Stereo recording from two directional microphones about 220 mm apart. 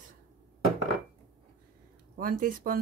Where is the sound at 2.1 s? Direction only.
40° right (ahead or behind).